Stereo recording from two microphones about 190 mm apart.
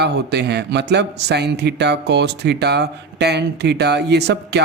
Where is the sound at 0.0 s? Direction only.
60° right (ahead or behind).